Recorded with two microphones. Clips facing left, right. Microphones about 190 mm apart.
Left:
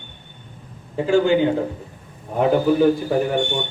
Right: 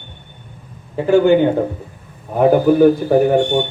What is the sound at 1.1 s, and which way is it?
A man's voice, 55° right (ahead or behind).